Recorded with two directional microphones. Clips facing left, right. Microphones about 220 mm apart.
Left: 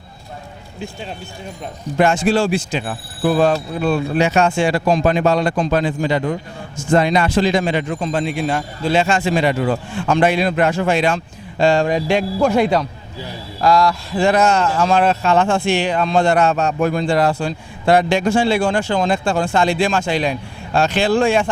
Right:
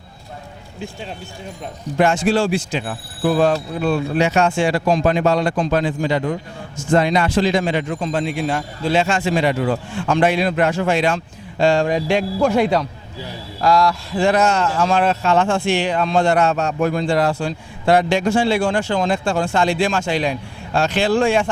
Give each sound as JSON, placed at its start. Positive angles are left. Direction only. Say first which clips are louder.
{"t": 2.0, "sound": "speech", "louder": "left 1 dB", "side_deg": 10}